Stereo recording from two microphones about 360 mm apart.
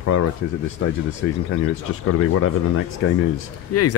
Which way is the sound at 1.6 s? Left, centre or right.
Left.